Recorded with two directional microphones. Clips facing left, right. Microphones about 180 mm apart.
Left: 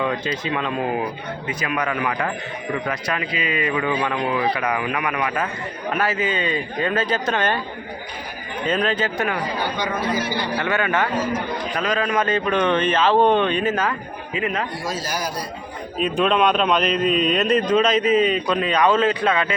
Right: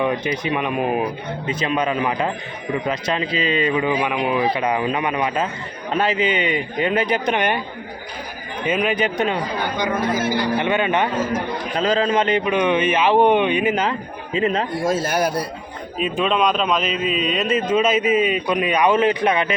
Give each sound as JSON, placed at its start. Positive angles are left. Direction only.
{"t": 0.0, "sound": "a man's voice", "side_deg": -15}
{"t": 8.6, "sound": "a man's voice", "side_deg": -10}
{"t": 12.5, "sound": "a man's voice", "side_deg": -10}
{"t": 14.3, "sound": "speech", "side_deg": -30}
{"t": 15.0, "sound": "a man's voice", "side_deg": -55}
{"t": 16.0, "sound": "a man's voice", "side_deg": 0}